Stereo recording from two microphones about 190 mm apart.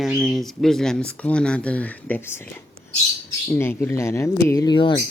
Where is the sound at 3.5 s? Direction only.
10° left (ahead or behind).